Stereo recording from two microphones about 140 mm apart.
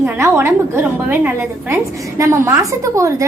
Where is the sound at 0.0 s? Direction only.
15° right (ahead or behind).